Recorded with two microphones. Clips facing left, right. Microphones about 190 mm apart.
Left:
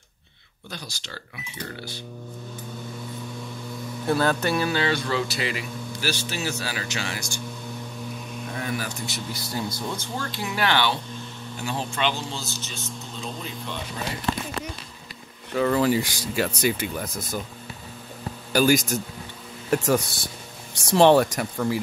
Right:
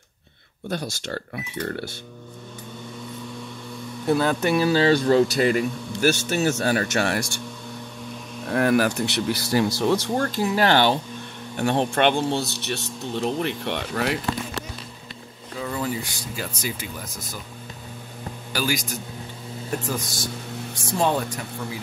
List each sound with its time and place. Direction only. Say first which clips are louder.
0.7 s speech: right 10 dB; 55° right (ahead or behind)
4.1 s speech: right 2 dB; 15° right (ahead or behind)
4.6 s speech: right 6 dB; 30° right (ahead or behind); by 7.2 s 60° right (ahead or behind)
8.5 s speech: right 12 dB; 65° right (ahead or behind)
10.4 s speech: right 4 dB; 40° right (ahead or behind)
11.5 s speech: right 9 dB; 65° right (ahead or behind)
15.5 s speech: left 7 dB; 80° left; by 17.4 s 55° left (ahead or behind)
18.5 s a man's voice: left 7 dB; 50° left (ahead or behind)
19.8 s speech: left 6 dB; 70° left (ahead or behind)
20.7 s speech: left 7 dB; 80° left